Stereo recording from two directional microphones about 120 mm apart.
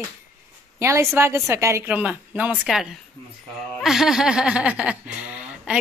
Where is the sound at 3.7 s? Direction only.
Centre (ahead or behind).